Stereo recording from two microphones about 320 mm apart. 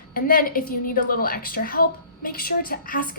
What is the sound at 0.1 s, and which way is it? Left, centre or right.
A woman's voice, left.